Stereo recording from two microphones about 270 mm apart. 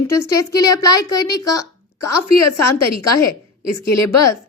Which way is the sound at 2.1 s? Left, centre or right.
Left.